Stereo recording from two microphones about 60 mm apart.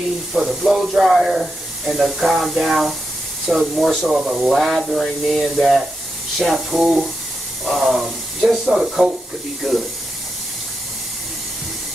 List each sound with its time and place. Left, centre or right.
0.3 s speech: centre